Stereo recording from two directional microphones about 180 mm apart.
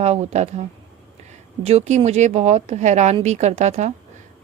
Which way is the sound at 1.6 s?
35° right (ahead or behind).